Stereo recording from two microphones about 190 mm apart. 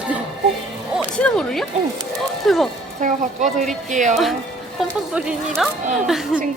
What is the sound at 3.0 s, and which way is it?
A woman's voice, 40° right (ahead or behind).